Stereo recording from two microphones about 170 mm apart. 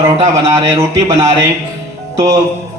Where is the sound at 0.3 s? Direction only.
20° right (ahead or behind).